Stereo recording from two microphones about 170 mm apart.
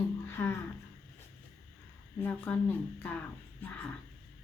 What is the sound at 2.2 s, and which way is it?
Speech, 10° left (ahead or behind).